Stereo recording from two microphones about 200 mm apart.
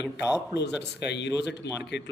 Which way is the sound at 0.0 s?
5° right (ahead or behind).